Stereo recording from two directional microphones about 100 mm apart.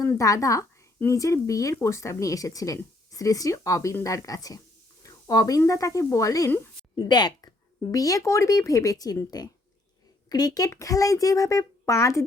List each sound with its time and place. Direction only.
0.0 s speech: 30° left (ahead or behind)
6.9 s speech: 45° left (ahead or behind)